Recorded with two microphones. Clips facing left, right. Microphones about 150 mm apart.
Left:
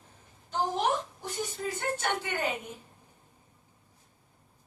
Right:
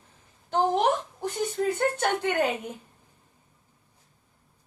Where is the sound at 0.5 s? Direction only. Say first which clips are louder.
Right 5 dB; 60° right (ahead or behind).